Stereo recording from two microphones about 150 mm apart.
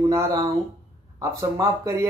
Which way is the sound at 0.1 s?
25° right (ahead or behind).